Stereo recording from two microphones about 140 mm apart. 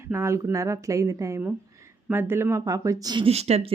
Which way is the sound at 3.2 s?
50° right (ahead or behind).